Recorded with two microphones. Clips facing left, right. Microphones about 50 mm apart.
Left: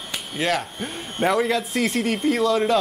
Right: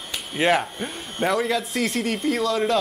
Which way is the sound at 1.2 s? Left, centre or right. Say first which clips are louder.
Left 2 dB; centre.